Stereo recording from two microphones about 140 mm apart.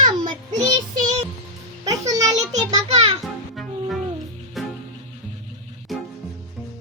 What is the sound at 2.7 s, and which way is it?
Music, 50° right (ahead or behind).